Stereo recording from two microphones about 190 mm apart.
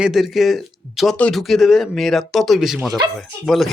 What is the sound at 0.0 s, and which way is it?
Speech, centre (ahead or behind).